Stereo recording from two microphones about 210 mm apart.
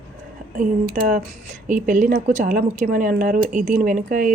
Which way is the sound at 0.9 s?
40° right (ahead or behind).